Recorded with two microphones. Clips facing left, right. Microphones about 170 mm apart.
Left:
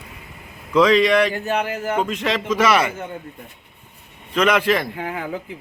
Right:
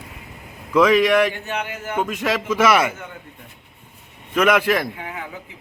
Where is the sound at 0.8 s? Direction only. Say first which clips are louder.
Even; 5° right (ahead or behind).